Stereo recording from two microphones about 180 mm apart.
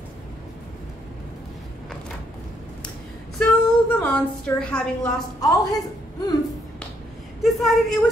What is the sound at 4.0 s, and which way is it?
A woman's voice, 5° left (ahead or behind).